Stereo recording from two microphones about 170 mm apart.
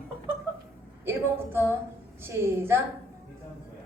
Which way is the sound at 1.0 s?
15° right (ahead or behind).